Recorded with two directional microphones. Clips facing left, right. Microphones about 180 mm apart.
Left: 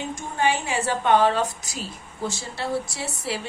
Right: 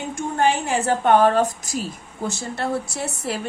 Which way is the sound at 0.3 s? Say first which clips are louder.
Right 3 dB; 50° right (ahead or behind).